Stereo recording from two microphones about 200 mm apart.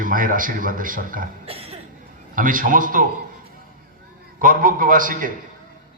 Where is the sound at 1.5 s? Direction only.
30° right (ahead or behind).